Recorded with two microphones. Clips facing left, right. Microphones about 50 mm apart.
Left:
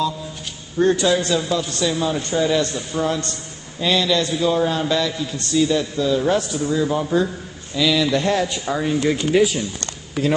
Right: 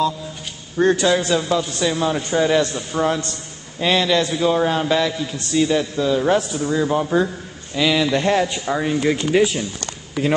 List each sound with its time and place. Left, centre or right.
0.7 s a man's voice: right; by 9.6 s centre